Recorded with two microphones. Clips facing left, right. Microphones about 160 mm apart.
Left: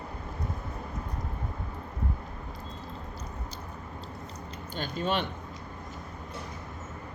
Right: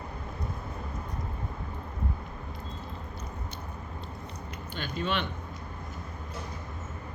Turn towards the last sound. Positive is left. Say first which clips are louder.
# left 2 dB
turn(degrees=45)  # may be behind; listen again after turning